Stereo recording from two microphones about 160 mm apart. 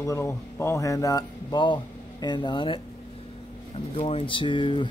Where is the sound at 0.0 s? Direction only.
15° left (ahead or behind).